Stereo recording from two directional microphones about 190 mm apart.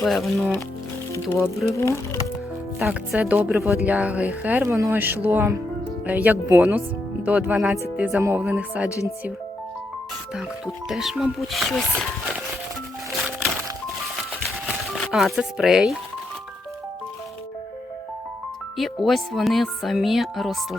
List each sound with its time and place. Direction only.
0.0 s speech: centre (ahead or behind)
1.1 s speech: 15° left (ahead or behind)
2.7 s speech: 5° right (ahead or behind)
8.9 s speech: 15° left (ahead or behind)
10.8 s speech: centre (ahead or behind)
14.9 s speech: centre (ahead or behind)
18.8 s speech: centre (ahead or behind)